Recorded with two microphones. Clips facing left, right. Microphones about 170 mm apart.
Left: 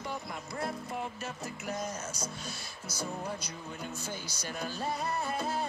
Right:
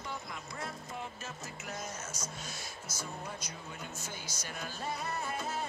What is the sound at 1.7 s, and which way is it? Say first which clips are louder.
Music: left 5 dB; 35° left (ahead or behind).